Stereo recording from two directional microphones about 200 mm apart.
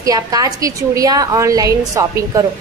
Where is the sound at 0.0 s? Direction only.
20° right (ahead or behind).